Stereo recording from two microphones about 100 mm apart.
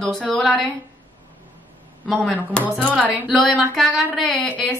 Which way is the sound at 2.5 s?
10° left (ahead or behind).